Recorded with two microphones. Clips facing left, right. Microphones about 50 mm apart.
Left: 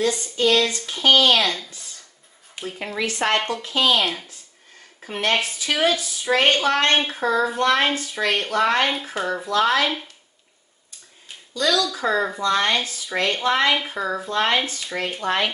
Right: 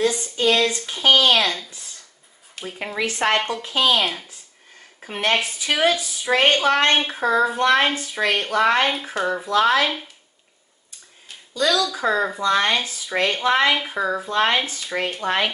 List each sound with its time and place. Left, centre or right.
0.0 s speech: centre
2.6 s a sound: centre
3.0 s speech: right
3.3 s speech: centre
11.5 s speech: centre